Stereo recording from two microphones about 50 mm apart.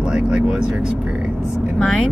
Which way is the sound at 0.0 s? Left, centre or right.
Centre.